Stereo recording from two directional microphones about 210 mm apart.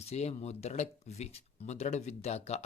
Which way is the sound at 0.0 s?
30° left (ahead or behind).